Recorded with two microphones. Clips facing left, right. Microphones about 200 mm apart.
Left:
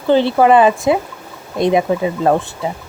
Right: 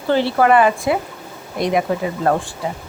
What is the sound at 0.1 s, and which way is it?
Speech, 20° left (ahead or behind).